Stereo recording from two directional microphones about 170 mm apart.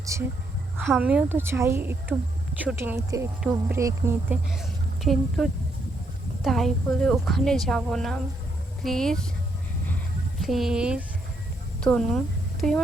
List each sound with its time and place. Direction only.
0.0 s a woman's voice: 20° right (ahead or behind)
0.8 s a woman's voice: 5° right (ahead or behind)
4.4 s a woman's voice: centre (ahead or behind)
10.4 s a woman's voice: centre (ahead or behind)
11.8 s speech: 5° left (ahead or behind)